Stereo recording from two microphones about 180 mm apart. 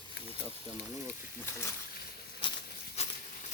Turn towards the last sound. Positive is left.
turn(degrees=35)  # may be behind; listen again after turning